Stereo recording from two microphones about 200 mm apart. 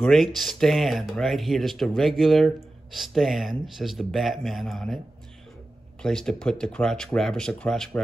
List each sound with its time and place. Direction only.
0.0 s speech: centre (ahead or behind)
6.0 s speech: 5° left (ahead or behind)